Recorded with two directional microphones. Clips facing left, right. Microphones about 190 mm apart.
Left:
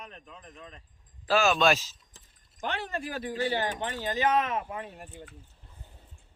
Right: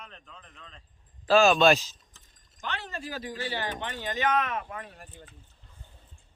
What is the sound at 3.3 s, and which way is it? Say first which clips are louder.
Speech: left 6 dB; 35° left (ahead or behind).